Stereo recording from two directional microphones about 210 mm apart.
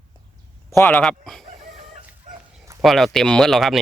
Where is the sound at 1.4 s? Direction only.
35° right (ahead or behind).